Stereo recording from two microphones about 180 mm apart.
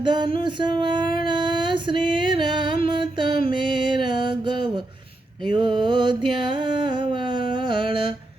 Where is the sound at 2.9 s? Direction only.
25° right (ahead or behind).